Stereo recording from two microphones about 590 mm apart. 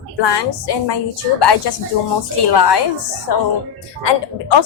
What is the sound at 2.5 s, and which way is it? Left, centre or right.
Speech, left.